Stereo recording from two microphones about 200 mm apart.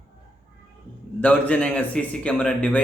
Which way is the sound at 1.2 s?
10° left (ahead or behind).